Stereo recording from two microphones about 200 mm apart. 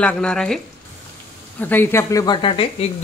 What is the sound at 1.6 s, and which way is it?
Speech, 10° left (ahead or behind).